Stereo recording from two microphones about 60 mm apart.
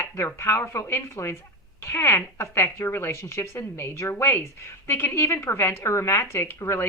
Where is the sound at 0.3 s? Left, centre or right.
Left.